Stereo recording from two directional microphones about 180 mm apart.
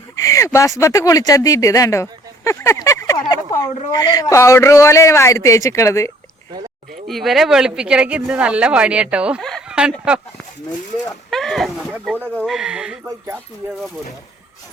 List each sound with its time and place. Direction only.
0.2 s speech: 15° left (ahead or behind)
7.1 s speech: centre (ahead or behind)
11.3 s speech: centre (ahead or behind)